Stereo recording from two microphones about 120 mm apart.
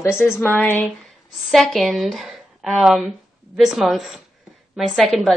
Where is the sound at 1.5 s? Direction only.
Centre (ahead or behind).